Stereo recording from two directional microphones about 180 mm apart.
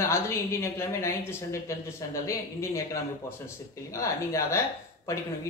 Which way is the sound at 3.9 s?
15° left (ahead or behind).